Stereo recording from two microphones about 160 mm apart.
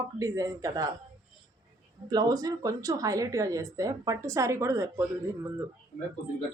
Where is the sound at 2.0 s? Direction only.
25° right (ahead or behind).